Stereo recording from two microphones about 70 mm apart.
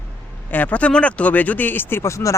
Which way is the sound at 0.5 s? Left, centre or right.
Left.